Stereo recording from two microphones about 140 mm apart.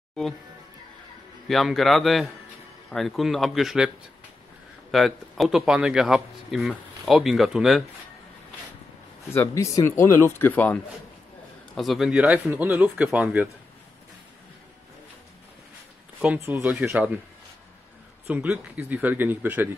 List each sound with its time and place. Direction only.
1.5 s speech: centre (ahead or behind)
4.9 s speech: centre (ahead or behind)
9.3 s speech: 20° left (ahead or behind)
11.7 s speech: centre (ahead or behind)
16.3 s speech: 20° right (ahead or behind)
18.2 s speech: 10° right (ahead or behind)